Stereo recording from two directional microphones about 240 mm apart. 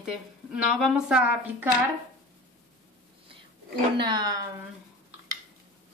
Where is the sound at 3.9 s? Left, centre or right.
Centre.